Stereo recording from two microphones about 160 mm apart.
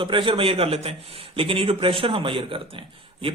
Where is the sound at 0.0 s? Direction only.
30° right (ahead or behind).